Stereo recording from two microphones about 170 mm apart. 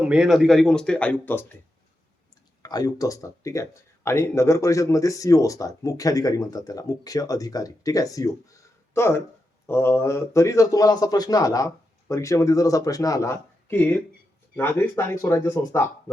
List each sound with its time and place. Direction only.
0.0 s speech: 5° right (ahead or behind); by 1.5 s 10° left (ahead or behind)
2.6 s speech: 20° left (ahead or behind)